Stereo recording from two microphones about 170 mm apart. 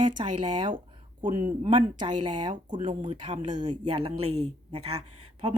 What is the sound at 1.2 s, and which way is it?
Speech, 50° right (ahead or behind).